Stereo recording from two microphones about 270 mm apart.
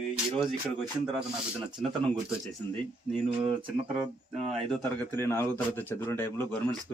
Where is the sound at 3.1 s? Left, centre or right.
Right.